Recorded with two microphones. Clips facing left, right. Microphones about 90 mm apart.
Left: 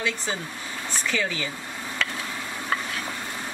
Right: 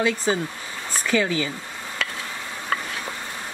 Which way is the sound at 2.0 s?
5° right (ahead or behind).